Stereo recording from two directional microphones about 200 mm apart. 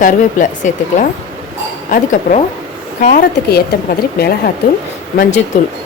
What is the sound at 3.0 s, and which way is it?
A woman's voice, 40° left (ahead or behind).